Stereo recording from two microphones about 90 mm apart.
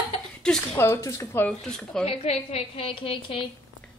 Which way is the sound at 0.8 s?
30° left (ahead or behind).